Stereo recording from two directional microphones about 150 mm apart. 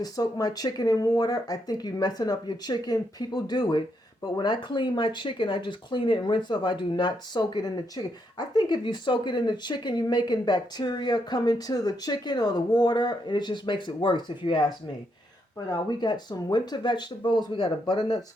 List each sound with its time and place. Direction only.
0.0 s speech: 25° left (ahead or behind)